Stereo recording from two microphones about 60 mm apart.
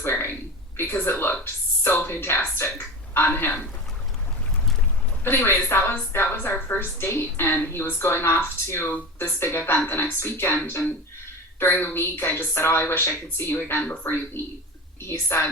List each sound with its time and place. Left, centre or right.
0.0 s a sound: left
5.2 s a woman's voice: left
11.6 s a woman's voice: left
15.0 s a woman's voice: left